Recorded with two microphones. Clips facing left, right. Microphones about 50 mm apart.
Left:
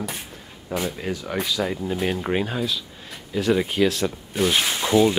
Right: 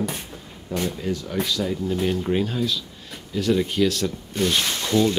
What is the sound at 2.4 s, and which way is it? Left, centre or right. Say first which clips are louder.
Speech: right 1 dB; centre.